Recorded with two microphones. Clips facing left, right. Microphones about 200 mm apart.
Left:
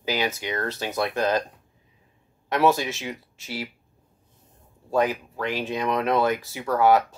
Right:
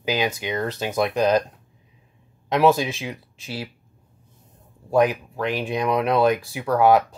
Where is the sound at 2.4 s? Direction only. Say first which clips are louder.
Right 3 dB; 15° right (ahead or behind).